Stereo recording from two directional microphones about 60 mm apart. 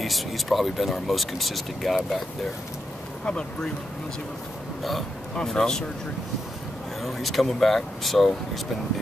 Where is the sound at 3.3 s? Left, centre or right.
Centre.